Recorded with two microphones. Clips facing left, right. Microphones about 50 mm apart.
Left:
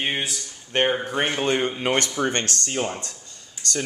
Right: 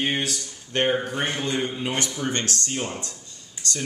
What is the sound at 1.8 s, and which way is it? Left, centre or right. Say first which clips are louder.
Speech: left 4 dB; left.